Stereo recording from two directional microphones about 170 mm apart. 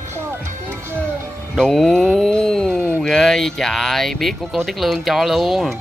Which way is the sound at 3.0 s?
Centre (ahead or behind).